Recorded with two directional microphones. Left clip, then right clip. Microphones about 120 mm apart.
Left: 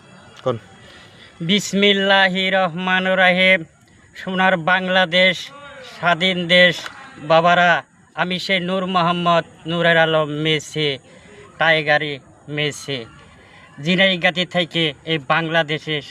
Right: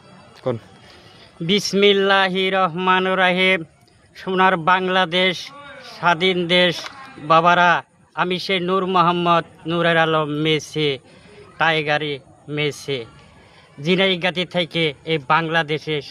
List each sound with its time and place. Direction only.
0.4 s a man's voice: 20° right (ahead or behind)
1.5 s a man's voice: 30° right (ahead or behind)